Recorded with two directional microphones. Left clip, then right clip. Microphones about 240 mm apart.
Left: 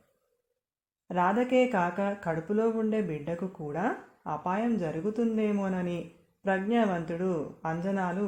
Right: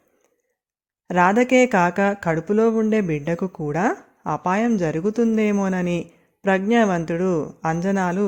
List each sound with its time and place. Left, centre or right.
1.0 s speech: right